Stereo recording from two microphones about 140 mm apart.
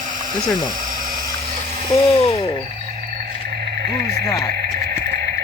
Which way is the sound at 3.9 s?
90° right.